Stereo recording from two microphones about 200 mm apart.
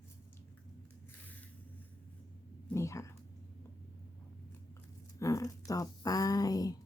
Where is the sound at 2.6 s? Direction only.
15° left (ahead or behind).